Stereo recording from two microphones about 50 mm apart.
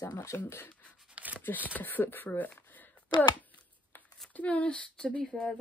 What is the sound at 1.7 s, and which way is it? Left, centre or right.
Speech, left.